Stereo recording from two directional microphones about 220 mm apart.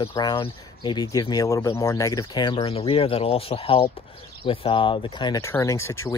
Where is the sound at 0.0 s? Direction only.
20° left (ahead or behind).